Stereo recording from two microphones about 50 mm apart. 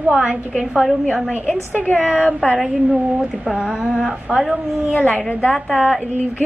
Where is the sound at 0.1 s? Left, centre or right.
Centre.